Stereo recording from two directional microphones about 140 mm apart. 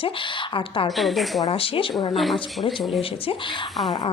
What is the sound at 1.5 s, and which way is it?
Speech, 40° left (ahead or behind).